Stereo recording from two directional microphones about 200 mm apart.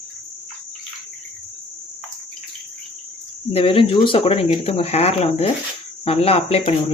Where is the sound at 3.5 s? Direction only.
30° left (ahead or behind).